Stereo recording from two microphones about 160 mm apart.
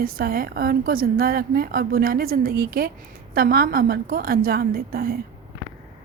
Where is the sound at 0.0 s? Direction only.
65° right (ahead or behind).